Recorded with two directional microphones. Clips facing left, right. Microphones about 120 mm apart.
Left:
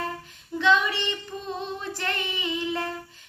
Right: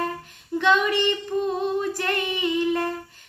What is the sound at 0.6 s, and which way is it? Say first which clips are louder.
Child singing: right 2 dB; 50° right (ahead or behind).